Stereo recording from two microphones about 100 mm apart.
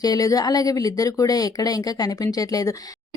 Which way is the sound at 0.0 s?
35° left (ahead or behind).